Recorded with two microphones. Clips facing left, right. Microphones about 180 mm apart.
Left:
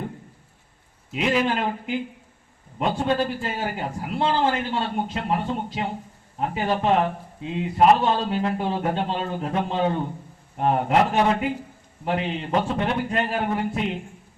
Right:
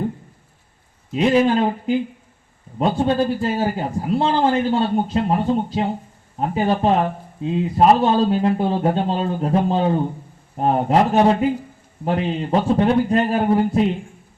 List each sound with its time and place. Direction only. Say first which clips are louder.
1.1 s a man's voice: right 7 dB; 35° right (ahead or behind)